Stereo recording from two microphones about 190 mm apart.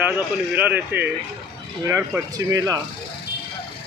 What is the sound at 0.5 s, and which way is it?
Speech, 10° right (ahead or behind).